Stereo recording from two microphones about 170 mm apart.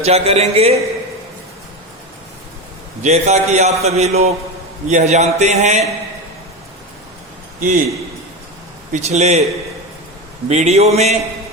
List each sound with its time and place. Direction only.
0.0 s a man's voice: 40° right (ahead or behind)
3.0 s a man's voice: 40° right (ahead or behind)
7.6 s a man's voice: 55° right (ahead or behind)
8.9 s a man's voice: 40° right (ahead or behind)
10.5 s a man's voice: 40° right (ahead or behind)